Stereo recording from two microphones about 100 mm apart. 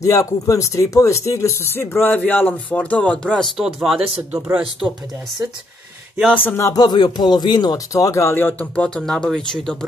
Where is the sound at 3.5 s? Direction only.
Centre (ahead or behind).